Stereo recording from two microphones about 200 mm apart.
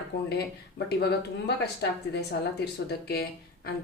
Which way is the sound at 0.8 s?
55° left (ahead or behind).